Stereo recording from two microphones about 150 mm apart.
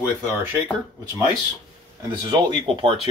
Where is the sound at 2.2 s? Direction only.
35° right (ahead or behind).